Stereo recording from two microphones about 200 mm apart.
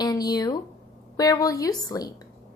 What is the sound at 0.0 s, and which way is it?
A woman's voice, 20° left (ahead or behind).